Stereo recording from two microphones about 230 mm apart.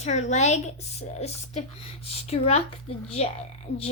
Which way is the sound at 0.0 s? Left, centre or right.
Left.